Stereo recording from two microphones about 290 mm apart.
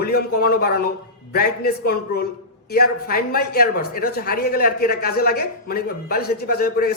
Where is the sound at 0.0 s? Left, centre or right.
Left.